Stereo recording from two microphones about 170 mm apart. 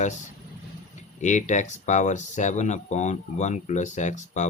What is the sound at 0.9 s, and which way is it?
Speech, 45° left (ahead or behind).